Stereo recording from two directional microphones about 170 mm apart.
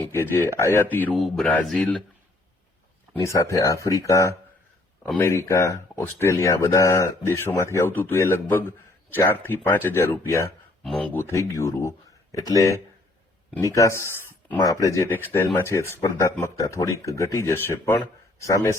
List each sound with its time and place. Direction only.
0.1 s speech: 15° left (ahead or behind)
3.2 s speech: 20° left (ahead or behind)